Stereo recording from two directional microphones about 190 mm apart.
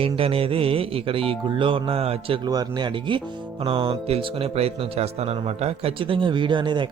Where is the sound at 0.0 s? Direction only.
30° right (ahead or behind).